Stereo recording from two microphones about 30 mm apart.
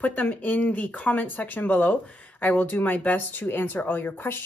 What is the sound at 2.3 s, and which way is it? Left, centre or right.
Speech, left.